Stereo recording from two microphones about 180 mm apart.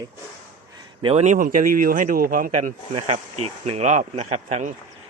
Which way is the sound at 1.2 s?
45° right (ahead or behind).